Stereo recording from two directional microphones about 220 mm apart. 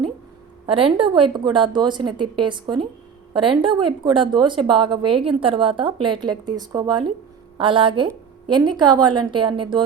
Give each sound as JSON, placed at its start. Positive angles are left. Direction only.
{"t": 0.7, "sound": "a woman's voice", "side_deg": -25}